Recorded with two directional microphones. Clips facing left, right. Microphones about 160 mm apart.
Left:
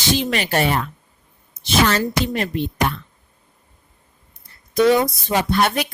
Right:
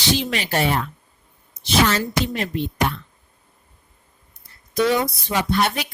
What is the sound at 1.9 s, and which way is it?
Speech, 55° left (ahead or behind).